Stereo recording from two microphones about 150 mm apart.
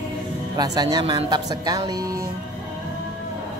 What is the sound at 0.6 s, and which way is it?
Speech, 25° right (ahead or behind).